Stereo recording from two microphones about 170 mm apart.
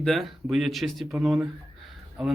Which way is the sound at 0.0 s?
Centre (ahead or behind).